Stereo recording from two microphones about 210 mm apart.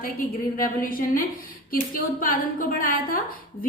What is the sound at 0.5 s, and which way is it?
A woman's voice, 40° left (ahead or behind).